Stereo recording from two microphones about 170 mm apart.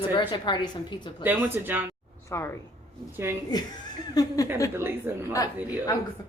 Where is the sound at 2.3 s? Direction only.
15° left (ahead or behind).